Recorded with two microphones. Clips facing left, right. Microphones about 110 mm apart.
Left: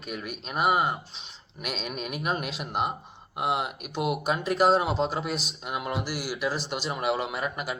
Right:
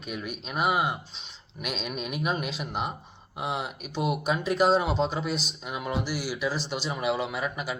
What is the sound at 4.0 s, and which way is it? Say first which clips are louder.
Speech: even; centre (ahead or behind).